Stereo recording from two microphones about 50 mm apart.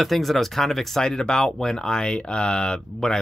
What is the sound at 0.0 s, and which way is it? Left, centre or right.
Speech, centre.